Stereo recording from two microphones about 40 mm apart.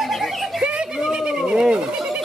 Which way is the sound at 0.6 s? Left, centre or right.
Right.